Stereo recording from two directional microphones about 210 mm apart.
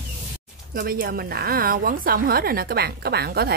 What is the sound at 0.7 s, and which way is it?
A woman's voice, 45° right (ahead or behind).